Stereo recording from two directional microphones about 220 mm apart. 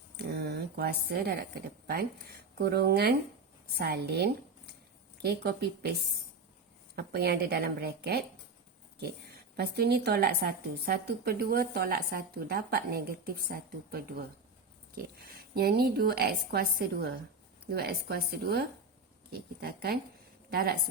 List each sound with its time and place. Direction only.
0.2 s a woman's voice: 50° right (ahead or behind)
9.6 s a woman's voice: 45° right (ahead or behind)